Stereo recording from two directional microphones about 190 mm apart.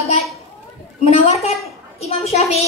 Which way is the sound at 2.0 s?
35° left (ahead or behind).